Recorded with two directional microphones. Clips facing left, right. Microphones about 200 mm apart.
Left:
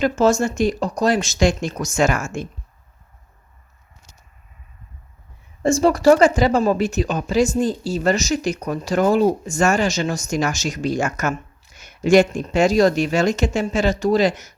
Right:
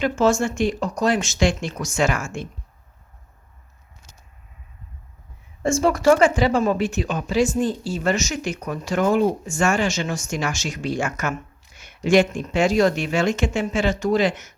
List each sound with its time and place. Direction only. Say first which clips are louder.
0.0 s speech: left 2 dB; 40° left (ahead or behind)
5.6 s speech: left 3 dB; 35° left (ahead or behind)